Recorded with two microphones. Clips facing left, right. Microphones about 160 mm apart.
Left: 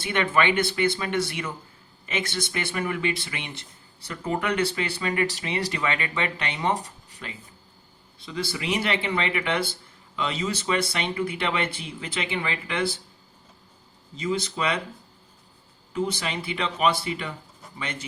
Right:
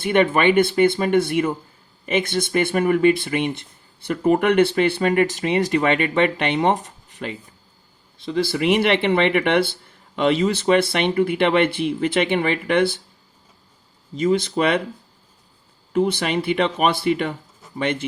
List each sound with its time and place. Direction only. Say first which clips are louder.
0.0 s speech: right 7 dB; 50° right (ahead or behind)
9.0 s speech: right 9 dB; 65° right (ahead or behind)
14.3 s speech: right 6 dB; 55° right (ahead or behind)
15.9 s speech: right 8 dB; 55° right (ahead or behind)